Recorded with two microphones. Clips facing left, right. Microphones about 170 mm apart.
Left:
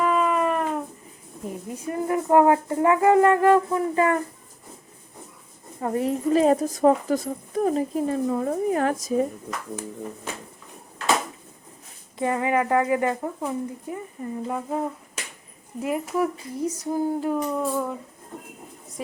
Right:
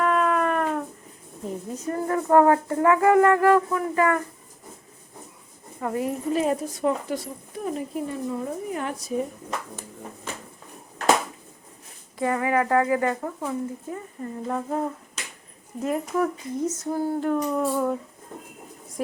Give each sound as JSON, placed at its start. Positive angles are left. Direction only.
{"t": 0.0, "sound": "a sound", "side_deg": 0}
{"t": 1.7, "sound": "speech", "side_deg": 15}
{"t": 5.8, "sound": "a woman's voice", "side_deg": 30}
{"t": 8.4, "sound": "speech", "side_deg": 55}
{"t": 8.8, "sound": "speech", "side_deg": 90}
{"t": 12.2, "sound": "speech", "side_deg": 20}